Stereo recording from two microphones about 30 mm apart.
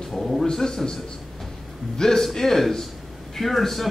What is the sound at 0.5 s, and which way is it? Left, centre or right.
Speech, centre.